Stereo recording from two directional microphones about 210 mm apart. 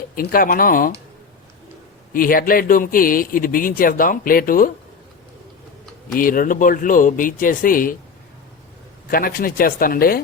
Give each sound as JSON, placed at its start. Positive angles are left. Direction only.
{"t": 0.2, "sound": "speech", "side_deg": 45}
{"t": 2.1, "sound": "speech", "side_deg": 40}
{"t": 6.1, "sound": "speech", "side_deg": 40}
{"t": 9.0, "sound": "speech", "side_deg": 45}